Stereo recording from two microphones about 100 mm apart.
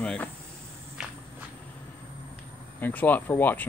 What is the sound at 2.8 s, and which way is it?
Speech, 15° left (ahead or behind).